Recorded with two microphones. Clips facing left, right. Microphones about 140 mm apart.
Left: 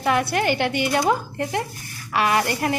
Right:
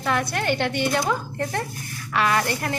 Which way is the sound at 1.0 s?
15° left (ahead or behind).